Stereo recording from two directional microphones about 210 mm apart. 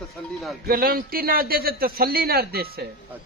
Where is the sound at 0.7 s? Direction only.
45° right (ahead or behind).